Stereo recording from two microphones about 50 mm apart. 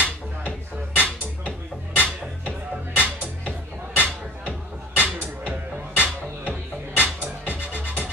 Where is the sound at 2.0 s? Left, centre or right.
Left.